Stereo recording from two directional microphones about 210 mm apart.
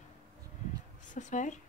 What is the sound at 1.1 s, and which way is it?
Speech, 35° left (ahead or behind).